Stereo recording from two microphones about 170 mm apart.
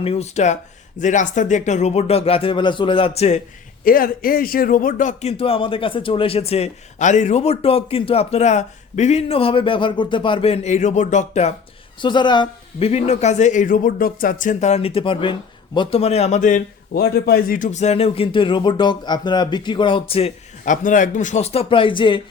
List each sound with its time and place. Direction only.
0.0 s speech: 35° left (ahead or behind)
3.8 s speech: 55° left (ahead or behind)
11.9 s speech: 25° left (ahead or behind)
12.9 s speech: 40° left (ahead or behind)
20.7 s speech: 50° left (ahead or behind); by 22.2 s 30° left (ahead or behind)